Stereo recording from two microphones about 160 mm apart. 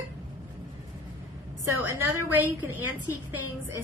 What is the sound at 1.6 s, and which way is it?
A woman's voice, 15° right (ahead or behind).